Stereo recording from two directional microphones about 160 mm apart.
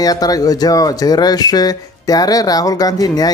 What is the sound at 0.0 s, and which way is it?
Speech, 25° left (ahead or behind).